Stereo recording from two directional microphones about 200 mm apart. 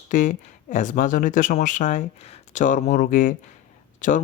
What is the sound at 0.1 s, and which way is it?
Speech, 40° left (ahead or behind).